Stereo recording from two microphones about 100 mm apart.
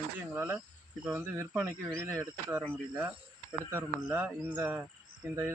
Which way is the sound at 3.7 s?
20° right (ahead or behind).